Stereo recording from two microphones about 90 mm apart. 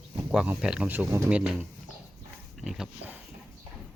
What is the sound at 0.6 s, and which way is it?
Speech, 10° right (ahead or behind).